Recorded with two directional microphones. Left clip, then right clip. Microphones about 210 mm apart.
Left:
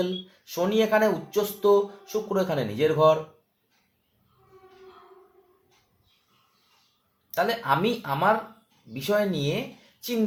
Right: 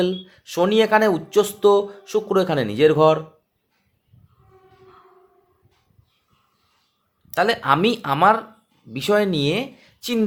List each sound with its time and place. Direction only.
0.0 s speech: 50° right (ahead or behind)
7.3 s speech: 50° right (ahead or behind)